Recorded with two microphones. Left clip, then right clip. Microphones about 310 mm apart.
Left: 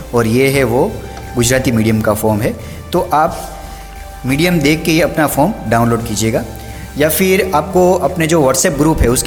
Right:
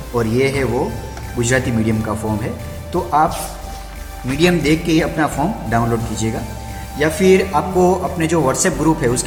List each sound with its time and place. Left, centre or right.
0.2 s speech: left
4.4 s speech: left